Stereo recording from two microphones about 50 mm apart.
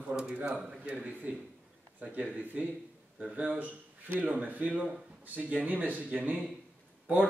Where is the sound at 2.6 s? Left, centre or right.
Right.